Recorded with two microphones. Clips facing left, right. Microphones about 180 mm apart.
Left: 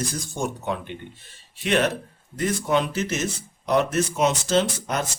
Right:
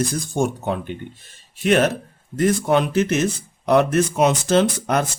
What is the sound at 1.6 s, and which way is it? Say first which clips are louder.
Speech: right 5 dB; 45° right (ahead or behind).